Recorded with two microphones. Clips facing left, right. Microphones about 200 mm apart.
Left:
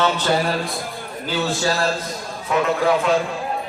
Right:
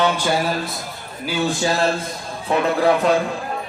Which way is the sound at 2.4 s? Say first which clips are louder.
Right 1 dB; 30° right (ahead or behind).